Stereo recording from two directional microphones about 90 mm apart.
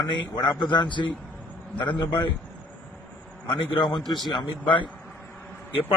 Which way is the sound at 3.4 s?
65° left (ahead or behind).